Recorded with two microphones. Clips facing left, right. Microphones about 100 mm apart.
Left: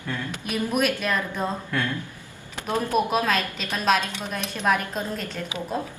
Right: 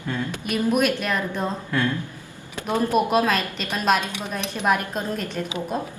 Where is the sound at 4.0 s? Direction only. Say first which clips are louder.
Right 1 dB; 15° right (ahead or behind).